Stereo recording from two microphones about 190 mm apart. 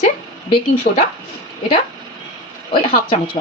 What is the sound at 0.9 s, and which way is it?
Speech, 35° left (ahead or behind).